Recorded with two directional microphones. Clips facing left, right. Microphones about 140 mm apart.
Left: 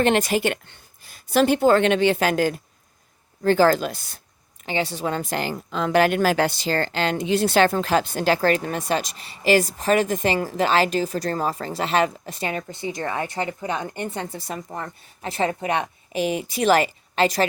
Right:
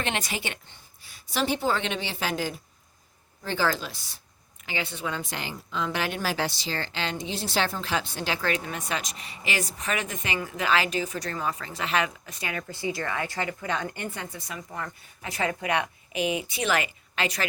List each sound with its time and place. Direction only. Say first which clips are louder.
0.0 s a woman's voice: left 11 dB; 45° left (ahead or behind)
4.6 s speech: left 7 dB; 35° left (ahead or behind)